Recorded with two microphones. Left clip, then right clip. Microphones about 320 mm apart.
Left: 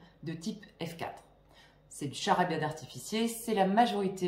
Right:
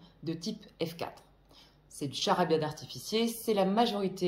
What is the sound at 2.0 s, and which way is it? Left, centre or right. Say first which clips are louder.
A woman's voice: even; centre.